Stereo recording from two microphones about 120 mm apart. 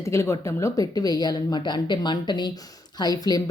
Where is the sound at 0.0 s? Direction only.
25° left (ahead or behind).